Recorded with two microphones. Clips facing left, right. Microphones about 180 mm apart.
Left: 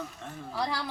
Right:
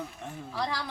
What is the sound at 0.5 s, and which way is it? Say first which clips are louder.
Speech: left 1 dB; 10° left (ahead or behind).